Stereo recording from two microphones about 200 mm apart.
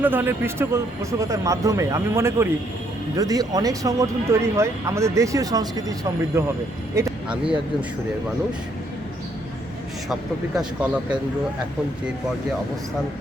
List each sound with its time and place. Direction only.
0.0 s speech: 10° right (ahead or behind)
6.9 s a sound: 15° right (ahead or behind)
10.1 s speech: centre (ahead or behind)